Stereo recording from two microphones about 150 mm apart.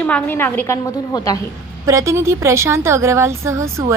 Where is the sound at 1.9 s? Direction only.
20° right (ahead or behind).